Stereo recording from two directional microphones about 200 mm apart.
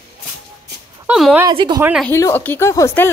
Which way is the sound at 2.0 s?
15° left (ahead or behind).